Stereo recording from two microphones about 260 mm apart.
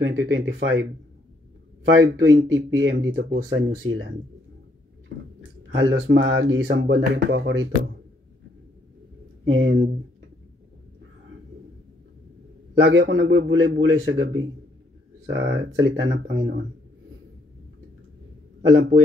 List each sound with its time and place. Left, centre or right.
0.0 s speech: right
2.0 s speech: right
5.4 s speech: right
9.4 s speech: right
12.8 s speech: right